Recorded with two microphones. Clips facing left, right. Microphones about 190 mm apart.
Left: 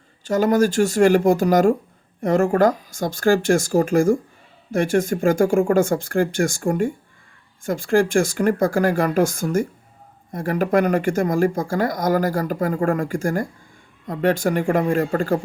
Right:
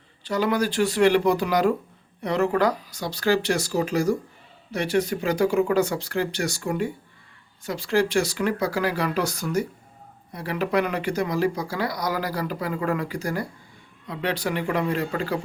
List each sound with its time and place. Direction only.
0.3 s speech: 45° left (ahead or behind)